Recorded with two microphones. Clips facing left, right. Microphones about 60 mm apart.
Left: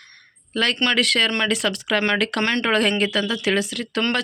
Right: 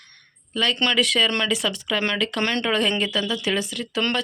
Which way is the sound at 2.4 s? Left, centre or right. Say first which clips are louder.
Left 2 dB; left.